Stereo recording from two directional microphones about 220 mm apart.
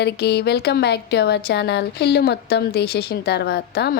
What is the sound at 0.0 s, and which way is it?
Speech, 50° left (ahead or behind).